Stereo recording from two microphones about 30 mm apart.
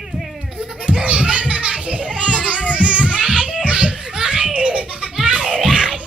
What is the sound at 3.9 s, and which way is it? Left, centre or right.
Children playing, centre.